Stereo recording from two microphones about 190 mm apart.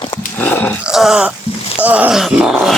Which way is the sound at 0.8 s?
Centre (ahead or behind).